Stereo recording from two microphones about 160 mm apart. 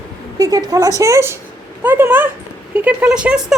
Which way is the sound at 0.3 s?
20° right (ahead or behind).